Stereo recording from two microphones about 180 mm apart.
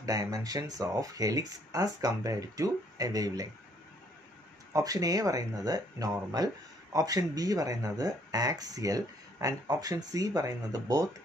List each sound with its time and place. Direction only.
0.0 s speech: 20° right (ahead or behind)
4.7 s speech: 20° right (ahead or behind)